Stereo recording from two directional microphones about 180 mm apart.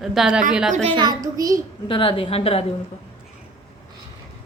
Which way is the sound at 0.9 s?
20° right (ahead or behind).